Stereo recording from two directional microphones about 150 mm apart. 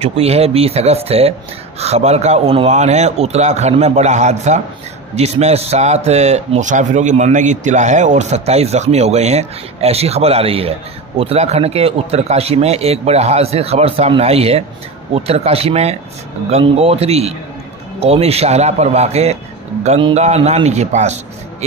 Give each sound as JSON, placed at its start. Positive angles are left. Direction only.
{"t": 0.0, "sound": "a man's voice", "side_deg": -45}